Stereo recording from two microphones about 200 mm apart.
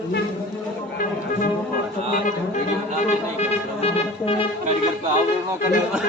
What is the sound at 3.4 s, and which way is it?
Music, 30° left (ahead or behind).